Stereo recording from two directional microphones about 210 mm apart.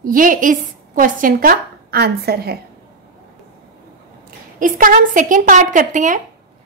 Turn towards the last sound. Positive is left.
turn(degrees=-40)  # may be behind; listen again after turning